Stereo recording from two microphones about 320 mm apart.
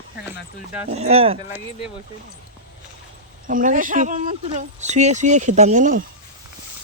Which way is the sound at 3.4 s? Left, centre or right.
Right.